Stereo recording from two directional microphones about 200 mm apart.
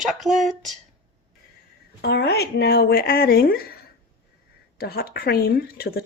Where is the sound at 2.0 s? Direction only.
55° left (ahead or behind).